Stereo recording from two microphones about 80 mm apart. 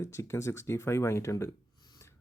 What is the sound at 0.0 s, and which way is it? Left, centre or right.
Speech, left.